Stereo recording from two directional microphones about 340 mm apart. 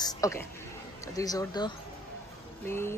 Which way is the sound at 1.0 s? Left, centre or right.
Centre.